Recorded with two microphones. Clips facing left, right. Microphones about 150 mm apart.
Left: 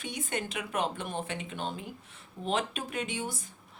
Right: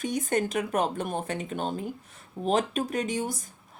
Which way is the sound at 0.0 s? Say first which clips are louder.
Right 8 dB; 40° right (ahead or behind).